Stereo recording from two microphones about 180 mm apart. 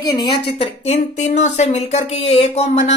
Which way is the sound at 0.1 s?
25° left (ahead or behind).